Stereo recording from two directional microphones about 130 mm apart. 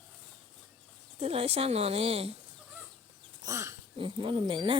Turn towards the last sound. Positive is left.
turn(degrees=-40)  # may be behind; listen again after turning